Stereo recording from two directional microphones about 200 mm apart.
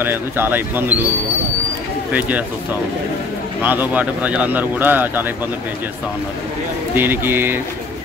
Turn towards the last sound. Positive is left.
turn(degrees=-10)  # may be behind; listen again after turning